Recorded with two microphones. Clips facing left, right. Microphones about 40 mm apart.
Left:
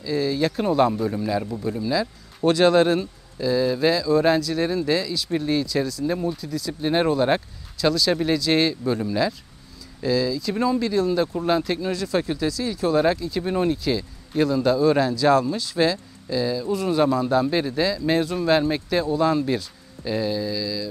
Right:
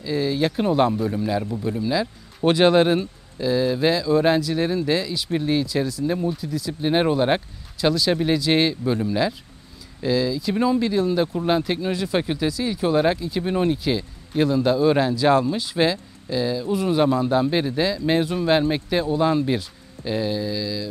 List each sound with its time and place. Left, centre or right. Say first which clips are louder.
0.0 s speech: even; centre
0.9 s speech: right 1 dB; centre